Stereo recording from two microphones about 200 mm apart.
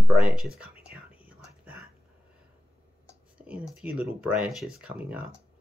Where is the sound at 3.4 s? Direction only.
5° right (ahead or behind).